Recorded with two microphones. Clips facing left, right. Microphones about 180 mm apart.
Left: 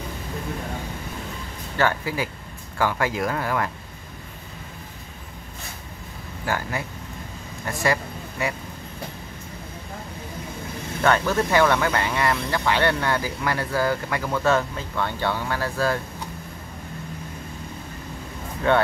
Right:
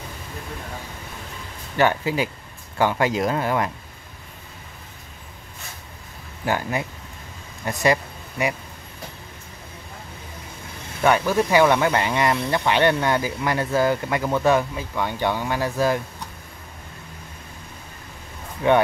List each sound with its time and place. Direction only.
1.8 s speech: 20° right (ahead or behind)
6.4 s speech: 20° right (ahead or behind)
11.0 s speech: 10° right (ahead or behind)
18.6 s speech: 15° right (ahead or behind)